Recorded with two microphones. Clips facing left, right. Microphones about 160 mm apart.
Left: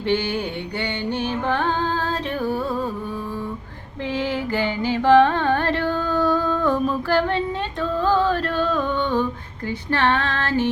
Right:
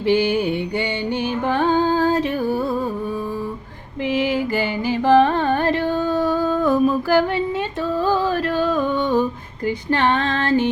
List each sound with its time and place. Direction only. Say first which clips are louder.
0.0 s music: right 5 dB; 10° right (ahead or behind)
4.0 s carnatic music: right 4 dB; 10° right (ahead or behind)
9.9 s female singing: right 1 dB; 15° right (ahead or behind)